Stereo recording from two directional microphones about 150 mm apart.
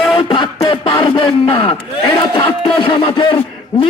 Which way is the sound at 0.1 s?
35° left (ahead or behind).